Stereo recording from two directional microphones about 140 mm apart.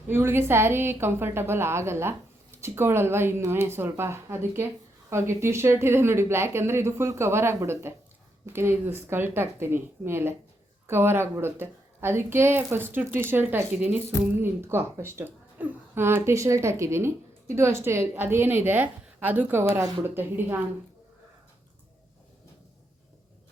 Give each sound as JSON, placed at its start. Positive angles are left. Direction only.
{"t": 0.1, "sound": "speech", "side_deg": -15}